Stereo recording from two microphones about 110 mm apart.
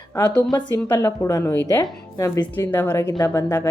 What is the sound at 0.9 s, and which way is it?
Speech, 30° left (ahead or behind).